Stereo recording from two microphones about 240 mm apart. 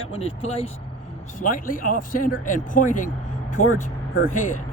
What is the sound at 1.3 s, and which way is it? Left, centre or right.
Speech, left.